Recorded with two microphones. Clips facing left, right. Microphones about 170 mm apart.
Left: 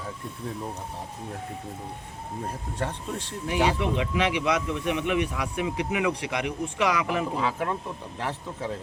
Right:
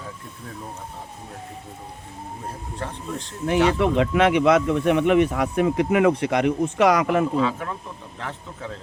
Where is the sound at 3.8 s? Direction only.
55° right (ahead or behind).